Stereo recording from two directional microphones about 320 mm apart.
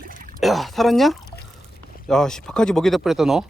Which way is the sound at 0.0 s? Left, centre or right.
Right.